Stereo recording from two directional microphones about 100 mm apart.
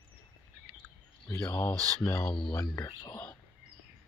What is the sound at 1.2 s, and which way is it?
Speech, 25° left (ahead or behind).